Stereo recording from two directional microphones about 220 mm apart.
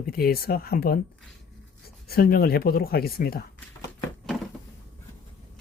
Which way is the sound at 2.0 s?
45° left (ahead or behind).